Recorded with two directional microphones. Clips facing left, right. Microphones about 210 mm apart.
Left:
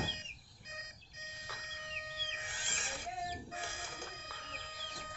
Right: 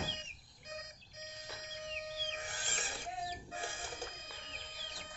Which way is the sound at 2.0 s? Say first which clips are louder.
Right 6 dB; 40° right (ahead or behind).